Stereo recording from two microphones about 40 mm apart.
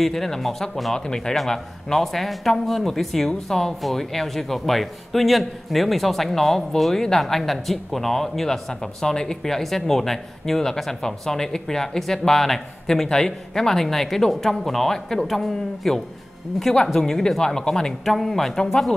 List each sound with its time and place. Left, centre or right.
0.0 s a man's voice: centre
0.9 s a man's voice: centre